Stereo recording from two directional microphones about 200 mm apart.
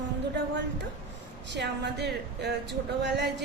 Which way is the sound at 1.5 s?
60° right (ahead or behind).